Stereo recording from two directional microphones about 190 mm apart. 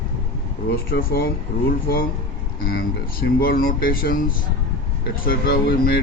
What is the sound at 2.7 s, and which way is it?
Speech, 50° left (ahead or behind).